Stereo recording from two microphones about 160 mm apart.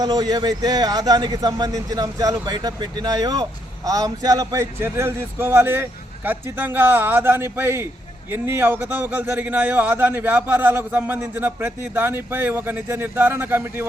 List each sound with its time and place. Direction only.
0.0 s a man's voice: 25° right (ahead or behind)